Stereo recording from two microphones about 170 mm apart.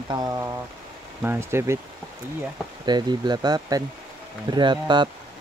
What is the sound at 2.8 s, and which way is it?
Speech, 25° right (ahead or behind).